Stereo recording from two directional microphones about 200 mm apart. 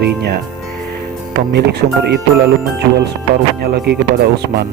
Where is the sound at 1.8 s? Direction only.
40° right (ahead or behind).